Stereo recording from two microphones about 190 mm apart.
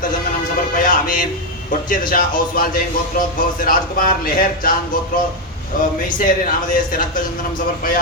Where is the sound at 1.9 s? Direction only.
45° left (ahead or behind).